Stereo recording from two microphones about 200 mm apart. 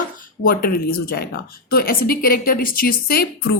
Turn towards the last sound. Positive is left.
turn(degrees=50)  # may be behind; listen again after turning